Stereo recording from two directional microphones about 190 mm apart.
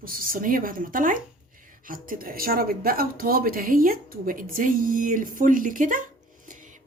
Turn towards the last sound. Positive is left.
turn(degrees=-45)  # may be behind; listen again after turning